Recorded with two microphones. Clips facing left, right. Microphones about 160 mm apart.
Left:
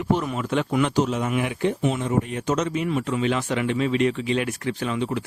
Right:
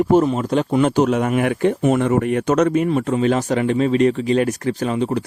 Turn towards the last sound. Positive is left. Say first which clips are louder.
# right 5 dB
turn(degrees=-40)  # may be behind; listen again after turning